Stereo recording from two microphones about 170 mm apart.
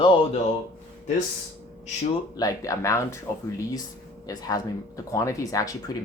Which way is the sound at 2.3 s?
20° left (ahead or behind).